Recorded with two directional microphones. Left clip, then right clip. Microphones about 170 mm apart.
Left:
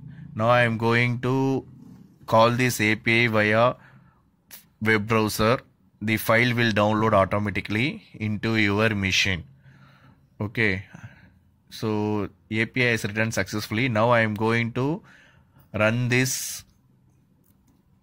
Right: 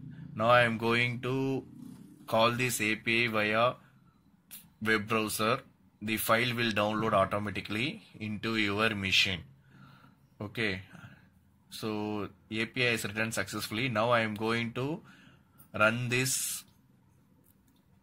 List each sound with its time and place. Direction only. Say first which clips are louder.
0.3 s speech: left 4 dB; 45° left (ahead or behind)
9.8 s a sound: left 3 dB; 55° left (ahead or behind)
11.7 s speech: left 9 dB; 60° left (ahead or behind)